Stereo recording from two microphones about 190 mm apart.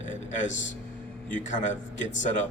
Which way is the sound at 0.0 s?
40° left (ahead or behind).